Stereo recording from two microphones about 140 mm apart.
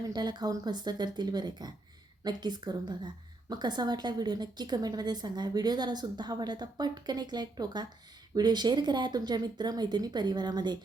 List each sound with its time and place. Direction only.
0.0 s a woman's voice: 30° right (ahead or behind)